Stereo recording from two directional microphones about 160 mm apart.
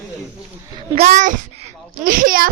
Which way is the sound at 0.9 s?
50° right (ahead or behind).